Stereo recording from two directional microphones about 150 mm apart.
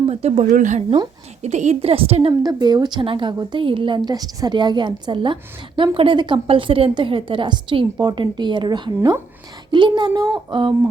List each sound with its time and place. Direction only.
0.1 s a woman's voice: 45° right (ahead or behind)
2.4 s a woman's voice: 25° right (ahead or behind)
9.0 s speech: 15° right (ahead or behind)
9.7 s a woman's voice: 30° right (ahead or behind)